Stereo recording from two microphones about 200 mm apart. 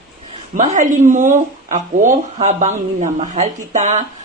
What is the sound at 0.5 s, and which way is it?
Speech, 35° right (ahead or behind).